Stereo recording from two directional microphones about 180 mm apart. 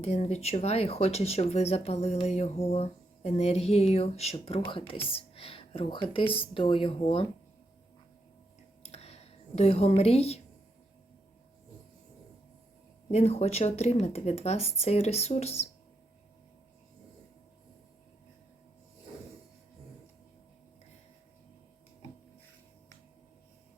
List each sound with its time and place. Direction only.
0.0 s speech: 35° left (ahead or behind)
8.8 s a sound: 35° left (ahead or behind)
13.1 s speech: 35° left (ahead or behind)